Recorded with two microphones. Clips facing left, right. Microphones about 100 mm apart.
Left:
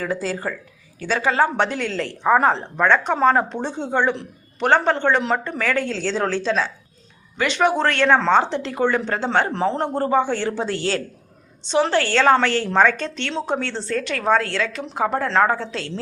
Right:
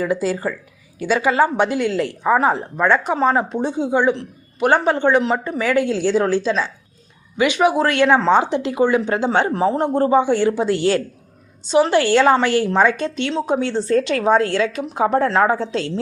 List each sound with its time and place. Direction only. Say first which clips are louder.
0.0 s a woman's voice: right 4 dB; 10° right (ahead or behind)
15.3 s a woman's voice: right 2 dB; 15° right (ahead or behind)